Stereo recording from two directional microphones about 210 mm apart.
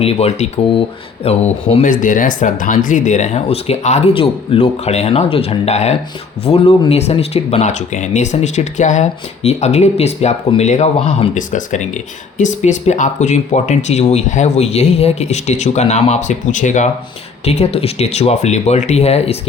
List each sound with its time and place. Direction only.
0.0 s speech: 30° left (ahead or behind)